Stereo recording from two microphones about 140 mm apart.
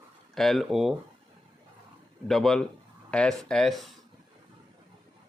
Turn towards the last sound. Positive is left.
turn(degrees=0)  # may be behind; listen again after turning